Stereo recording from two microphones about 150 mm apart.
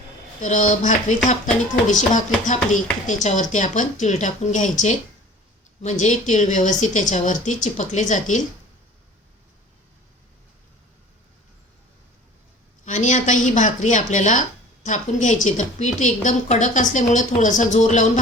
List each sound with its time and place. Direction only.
0.4 s a woman's voice: 55° left (ahead or behind)
12.8 s a woman's voice: 55° left (ahead or behind)